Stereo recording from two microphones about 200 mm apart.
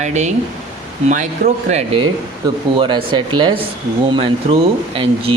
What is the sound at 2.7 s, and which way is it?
Speech, 25° right (ahead or behind).